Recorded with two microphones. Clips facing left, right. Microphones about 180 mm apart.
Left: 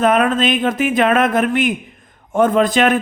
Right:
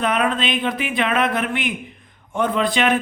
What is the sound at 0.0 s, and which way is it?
Speech, 45° left (ahead or behind).